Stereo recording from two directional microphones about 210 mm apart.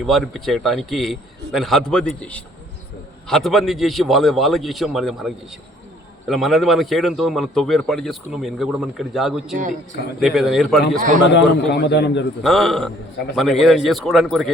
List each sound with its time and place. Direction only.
0.0 s a man's voice: centre (ahead or behind)
9.6 s a man's voice: 35° right (ahead or behind)
10.2 s a man's voice: centre (ahead or behind)
11.7 s a man's voice: 55° left (ahead or behind)
12.4 s a man's voice: centre (ahead or behind)